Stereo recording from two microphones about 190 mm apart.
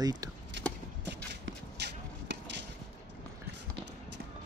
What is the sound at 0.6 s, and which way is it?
Clip-clop, 70° right (ahead or behind).